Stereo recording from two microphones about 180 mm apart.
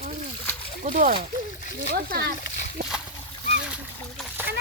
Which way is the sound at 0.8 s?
50° right (ahead or behind).